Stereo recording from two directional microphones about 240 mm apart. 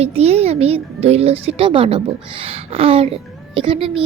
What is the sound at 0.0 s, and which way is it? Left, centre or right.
A child's voice, right.